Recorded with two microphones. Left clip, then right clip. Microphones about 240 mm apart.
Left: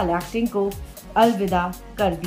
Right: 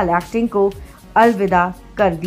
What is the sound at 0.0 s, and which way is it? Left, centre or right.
Speech, right.